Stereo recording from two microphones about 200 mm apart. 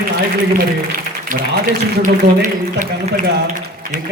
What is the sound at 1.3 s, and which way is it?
A man's voice, 45° right (ahead or behind).